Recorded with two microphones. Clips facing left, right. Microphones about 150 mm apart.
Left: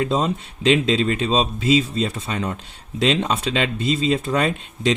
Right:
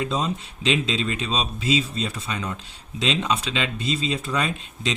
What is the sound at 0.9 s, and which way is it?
Speech, 45° left (ahead or behind).